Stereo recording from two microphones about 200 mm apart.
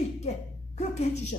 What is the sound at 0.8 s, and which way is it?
Speech, 35° left (ahead or behind).